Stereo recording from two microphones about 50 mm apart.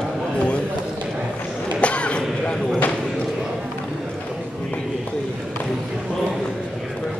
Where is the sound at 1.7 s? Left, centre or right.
Left.